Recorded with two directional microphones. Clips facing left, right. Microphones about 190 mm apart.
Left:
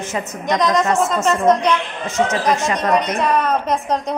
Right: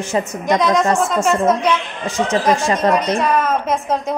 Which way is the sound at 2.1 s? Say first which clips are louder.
Right 1 dB; 30° right (ahead or behind).